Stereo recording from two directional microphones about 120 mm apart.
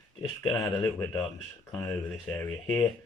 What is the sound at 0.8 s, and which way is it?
Speech, 20° left (ahead or behind).